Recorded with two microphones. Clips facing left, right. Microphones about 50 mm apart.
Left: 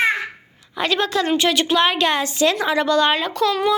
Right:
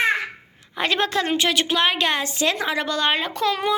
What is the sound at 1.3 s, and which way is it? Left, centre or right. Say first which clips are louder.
A woman's voice: left 3 dB; centre.